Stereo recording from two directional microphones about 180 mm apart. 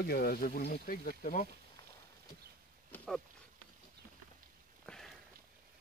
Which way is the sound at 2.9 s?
10° left (ahead or behind).